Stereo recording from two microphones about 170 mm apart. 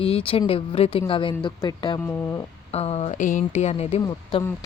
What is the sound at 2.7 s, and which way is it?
Speech, 35° left (ahead or behind).